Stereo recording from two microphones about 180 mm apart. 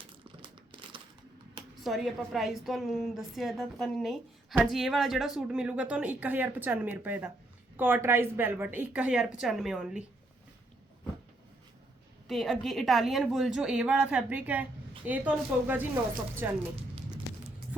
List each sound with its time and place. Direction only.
0.7 s a sound: 25° right (ahead or behind)
1.8 s a woman's voice: centre (ahead or behind)
12.3 s a woman's voice: centre (ahead or behind)